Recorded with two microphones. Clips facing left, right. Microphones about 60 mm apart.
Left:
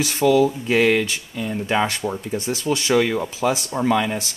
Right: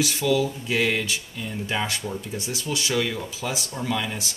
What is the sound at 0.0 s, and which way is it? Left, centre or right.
Speech, left.